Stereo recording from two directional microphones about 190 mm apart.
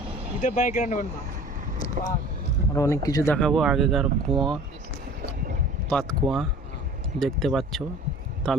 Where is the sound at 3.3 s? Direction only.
Centre (ahead or behind).